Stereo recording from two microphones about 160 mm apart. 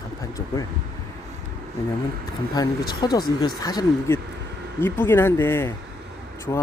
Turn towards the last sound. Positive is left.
turn(degrees=20)  # may be behind; listen again after turning